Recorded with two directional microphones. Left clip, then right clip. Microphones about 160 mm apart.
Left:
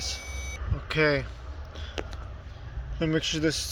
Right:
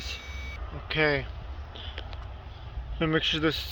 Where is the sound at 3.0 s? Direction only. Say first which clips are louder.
Right 1 dB; 20° right (ahead or behind).